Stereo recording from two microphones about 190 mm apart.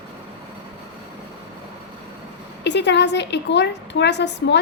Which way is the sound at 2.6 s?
65° left (ahead or behind).